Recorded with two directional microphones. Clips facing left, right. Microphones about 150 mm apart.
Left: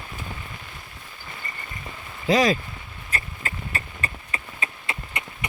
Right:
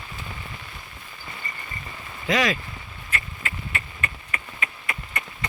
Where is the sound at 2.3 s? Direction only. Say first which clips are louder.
Left 4 dB; 35° left (ahead or behind).